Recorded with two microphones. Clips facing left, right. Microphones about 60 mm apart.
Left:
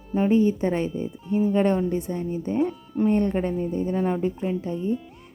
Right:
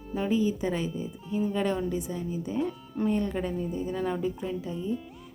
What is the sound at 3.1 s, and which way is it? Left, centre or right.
Speech, left.